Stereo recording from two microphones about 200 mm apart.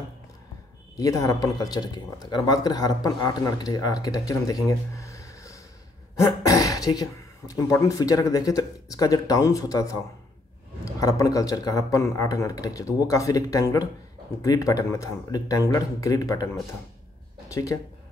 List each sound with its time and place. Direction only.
0.9 s speech: 15° left (ahead or behind)
11.0 s speech: 15° left (ahead or behind)
17.5 s speech: 15° left (ahead or behind)